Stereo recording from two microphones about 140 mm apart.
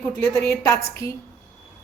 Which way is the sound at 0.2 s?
20° left (ahead or behind).